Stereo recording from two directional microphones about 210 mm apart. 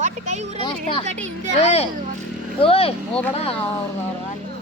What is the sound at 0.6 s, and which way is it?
Speech, 25° left (ahead or behind).